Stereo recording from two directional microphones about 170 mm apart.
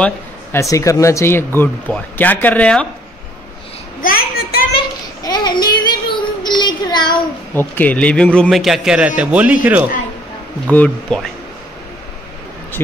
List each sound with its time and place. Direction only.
0.0 s speech: 15° left (ahead or behind)
4.0 s a sound: 60° left (ahead or behind)
5.2 s child singing: 25° left (ahead or behind)
7.5 s a man's voice: 10° left (ahead or behind); by 9.8 s 10° right (ahead or behind)
10.7 s speech: 5° left (ahead or behind)